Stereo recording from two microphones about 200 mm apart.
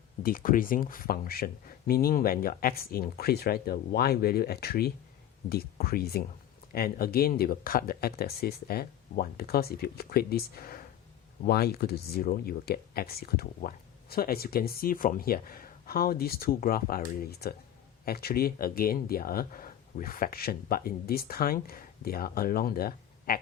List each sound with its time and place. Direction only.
0.2 s speech: 45° left (ahead or behind)